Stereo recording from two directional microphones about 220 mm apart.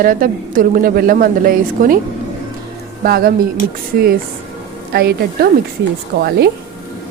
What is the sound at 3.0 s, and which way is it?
Speech, 45° right (ahead or behind).